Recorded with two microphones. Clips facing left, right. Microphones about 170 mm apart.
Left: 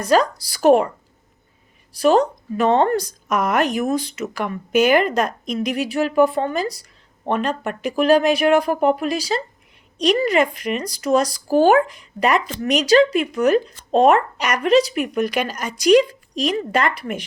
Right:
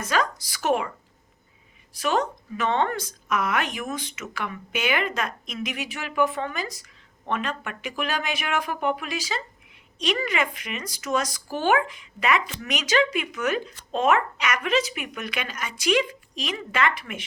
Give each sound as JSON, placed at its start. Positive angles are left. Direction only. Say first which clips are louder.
{"t": 0.0, "sound": "a woman's voice", "louder": "left 9 dB", "side_deg": 35}
{"t": 1.9, "sound": "a woman's voice", "louder": "left 9 dB", "side_deg": 35}